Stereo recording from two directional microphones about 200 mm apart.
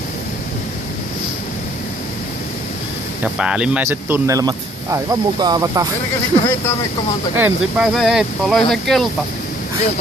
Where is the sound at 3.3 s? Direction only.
5° right (ahead or behind).